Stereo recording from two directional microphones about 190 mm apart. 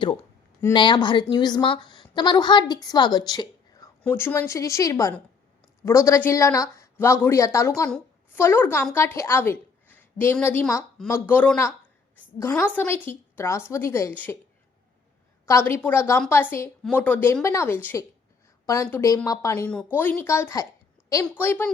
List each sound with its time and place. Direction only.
0.7 s a woman's voice: 25° left (ahead or behind)
4.0 s a woman's voice: 10° left (ahead or behind)
15.4 s a woman's voice: 15° left (ahead or behind)